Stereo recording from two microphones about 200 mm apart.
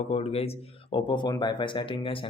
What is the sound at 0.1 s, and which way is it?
Speech, 30° left (ahead or behind).